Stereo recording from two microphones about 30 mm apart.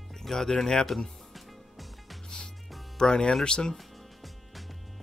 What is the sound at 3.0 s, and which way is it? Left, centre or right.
Speech, left.